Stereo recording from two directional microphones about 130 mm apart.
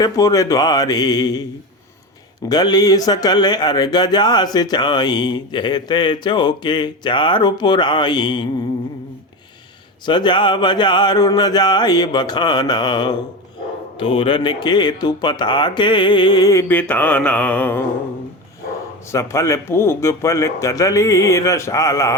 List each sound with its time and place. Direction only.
0.0 s speech: 30° left (ahead or behind)
2.5 s speech: 30° left (ahead or behind)
10.1 s speech: 35° left (ahead or behind)
16.6 s a sound: 15° left (ahead or behind)
19.1 s speech: 25° left (ahead or behind)